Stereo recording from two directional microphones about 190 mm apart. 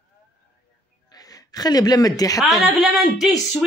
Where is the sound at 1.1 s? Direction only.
20° left (ahead or behind).